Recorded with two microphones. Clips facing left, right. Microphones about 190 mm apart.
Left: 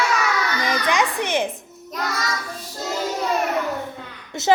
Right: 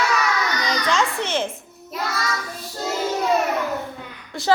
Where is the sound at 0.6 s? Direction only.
15° left (ahead or behind).